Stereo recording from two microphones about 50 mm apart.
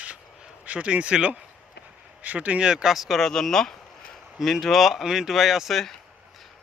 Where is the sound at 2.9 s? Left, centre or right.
Centre.